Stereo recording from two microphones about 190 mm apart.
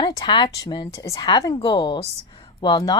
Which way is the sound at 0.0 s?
20° left (ahead or behind).